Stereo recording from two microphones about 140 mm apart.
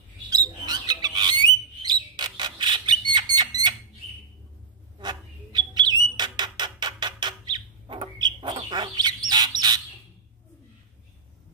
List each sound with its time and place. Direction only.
0.3 s bird: 30° right (ahead or behind)
4.9 s bird: 30° right (ahead or behind)